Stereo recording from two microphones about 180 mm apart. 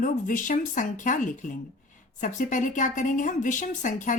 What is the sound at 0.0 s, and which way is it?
Speech, 45° left (ahead or behind).